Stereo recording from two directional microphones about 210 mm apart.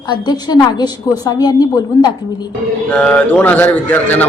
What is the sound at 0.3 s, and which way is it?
Speech, 20° left (ahead or behind).